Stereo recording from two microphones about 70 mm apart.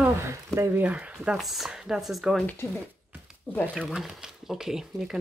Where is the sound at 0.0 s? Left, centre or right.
Right.